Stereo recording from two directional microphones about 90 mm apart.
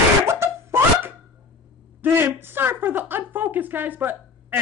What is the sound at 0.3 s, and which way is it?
Laughter, 30° right (ahead or behind).